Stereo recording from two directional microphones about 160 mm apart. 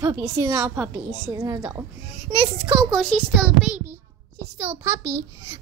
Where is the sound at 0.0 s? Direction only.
25° right (ahead or behind).